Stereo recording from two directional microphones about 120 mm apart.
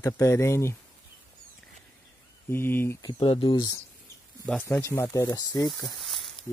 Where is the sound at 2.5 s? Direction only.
20° left (ahead or behind).